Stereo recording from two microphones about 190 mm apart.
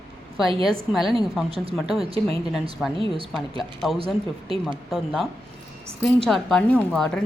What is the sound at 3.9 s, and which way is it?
Speech, 30° right (ahead or behind).